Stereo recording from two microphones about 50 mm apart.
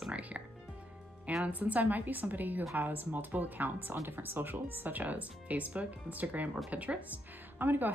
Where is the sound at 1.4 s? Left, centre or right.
Right.